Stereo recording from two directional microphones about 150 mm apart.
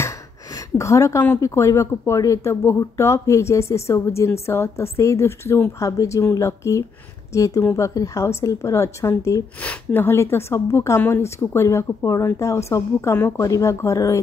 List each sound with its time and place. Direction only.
0.7 s a woman's voice: 20° left (ahead or behind)